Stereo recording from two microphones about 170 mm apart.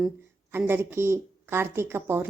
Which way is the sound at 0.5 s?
15° right (ahead or behind).